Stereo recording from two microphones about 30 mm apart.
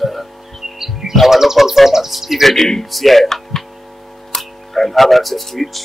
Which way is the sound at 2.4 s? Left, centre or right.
Centre.